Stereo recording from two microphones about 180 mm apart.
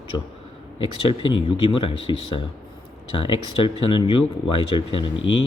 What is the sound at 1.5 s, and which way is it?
Speech, 30° left (ahead or behind).